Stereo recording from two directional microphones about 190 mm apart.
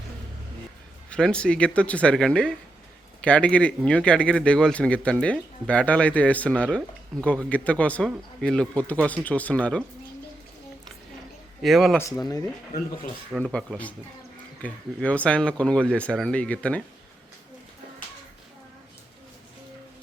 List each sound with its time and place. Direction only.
1.1 s a man's voice: 5° left (ahead or behind)
11.6 s speech: centre (ahead or behind)
11.9 s a man's voice: 15° left (ahead or behind)
13.3 s a man's voice: 5° left (ahead or behind)